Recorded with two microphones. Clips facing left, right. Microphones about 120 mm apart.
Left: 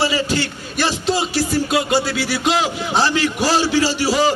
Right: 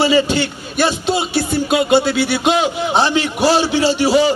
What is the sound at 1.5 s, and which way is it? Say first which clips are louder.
Music: right 5 dB; 25° right (ahead or behind).